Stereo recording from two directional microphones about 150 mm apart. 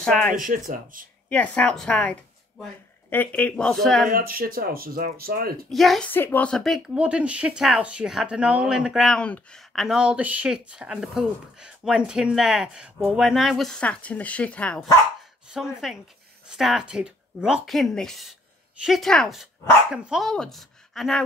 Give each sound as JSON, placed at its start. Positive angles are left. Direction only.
{"t": 0.0, "sound": "speech", "side_deg": 5}
{"t": 0.3, "sound": "speech", "side_deg": -60}
{"t": 1.3, "sound": "speech", "side_deg": 10}
{"t": 4.1, "sound": "speech", "side_deg": -70}
{"t": 5.7, "sound": "speech", "side_deg": 0}
{"t": 6.0, "sound": "speech", "side_deg": 10}